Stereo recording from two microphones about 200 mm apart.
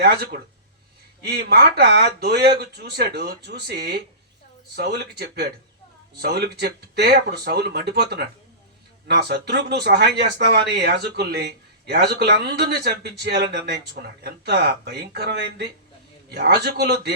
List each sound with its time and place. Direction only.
0.0 s speech: 55° right (ahead or behind)